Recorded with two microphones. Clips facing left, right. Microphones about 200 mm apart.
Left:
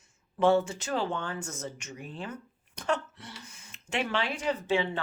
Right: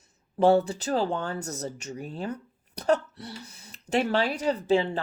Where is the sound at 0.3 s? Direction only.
35° right (ahead or behind).